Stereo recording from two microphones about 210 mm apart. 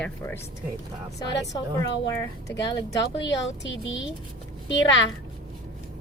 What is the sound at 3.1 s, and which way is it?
Speech, 60° left (ahead or behind).